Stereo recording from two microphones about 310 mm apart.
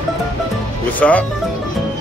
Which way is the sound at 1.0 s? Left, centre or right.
Centre.